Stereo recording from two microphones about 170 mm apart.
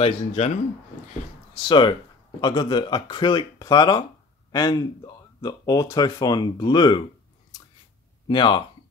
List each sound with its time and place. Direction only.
0.0 s speech: 35° left (ahead or behind)
1.5 s speech: 30° left (ahead or behind)
8.3 s speech: 30° left (ahead or behind)